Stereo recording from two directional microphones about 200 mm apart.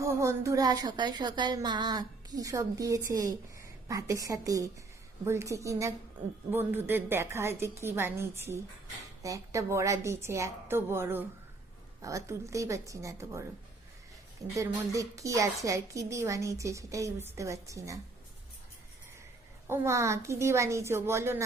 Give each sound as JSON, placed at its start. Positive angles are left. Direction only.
{"t": 0.0, "sound": "a woman's voice", "side_deg": -15}
{"t": 14.5, "sound": "a woman's voice", "side_deg": -15}
{"t": 19.6, "sound": "a woman's voice", "side_deg": -15}